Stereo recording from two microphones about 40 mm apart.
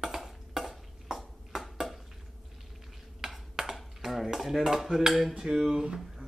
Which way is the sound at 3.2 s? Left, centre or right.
Centre.